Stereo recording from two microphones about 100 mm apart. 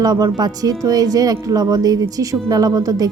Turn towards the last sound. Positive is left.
turn(degrees=-35)  # may be behind; listen again after turning